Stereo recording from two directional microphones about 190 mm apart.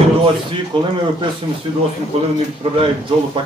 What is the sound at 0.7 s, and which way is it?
Speech, 25° right (ahead or behind).